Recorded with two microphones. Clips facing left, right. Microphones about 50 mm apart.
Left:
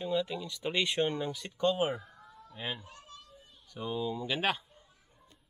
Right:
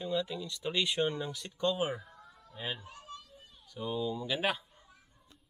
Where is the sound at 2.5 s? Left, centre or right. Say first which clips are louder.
Left 1 dB; centre.